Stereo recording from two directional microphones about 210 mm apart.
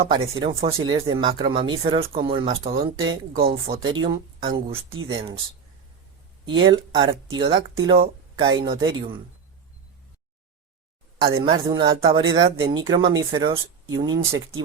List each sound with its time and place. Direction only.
0.0 s speech: 25° right (ahead or behind)
6.4 s speech: 20° right (ahead or behind)
11.2 s speech: 20° right (ahead or behind)